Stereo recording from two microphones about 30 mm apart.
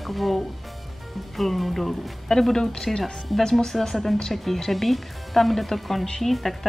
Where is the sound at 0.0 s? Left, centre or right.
Centre.